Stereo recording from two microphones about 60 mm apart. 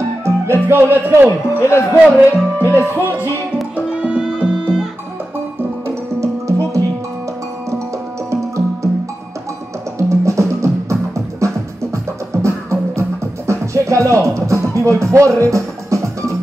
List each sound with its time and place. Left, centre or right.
0.2 s speech: right
1.6 s speech: left
2.6 s speech: right
3.7 s music: centre
6.2 s music: right
8.3 s music: right
9.9 s music: right